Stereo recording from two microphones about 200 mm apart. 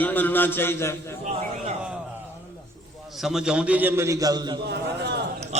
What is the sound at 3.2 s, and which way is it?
A man's voice, centre (ahead or behind).